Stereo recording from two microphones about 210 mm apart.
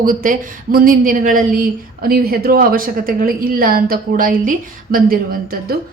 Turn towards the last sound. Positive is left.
turn(degrees=-45)  # may be behind; listen again after turning